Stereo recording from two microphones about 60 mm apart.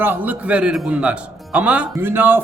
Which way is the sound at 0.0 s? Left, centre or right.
Right.